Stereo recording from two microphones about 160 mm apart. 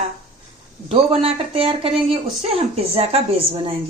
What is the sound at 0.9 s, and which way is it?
Speech, 40° right (ahead or behind).